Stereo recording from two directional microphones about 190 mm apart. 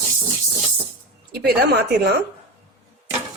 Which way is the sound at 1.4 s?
60° right (ahead or behind).